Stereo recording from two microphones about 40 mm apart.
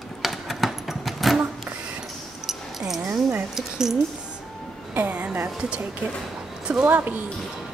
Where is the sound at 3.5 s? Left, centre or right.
Centre.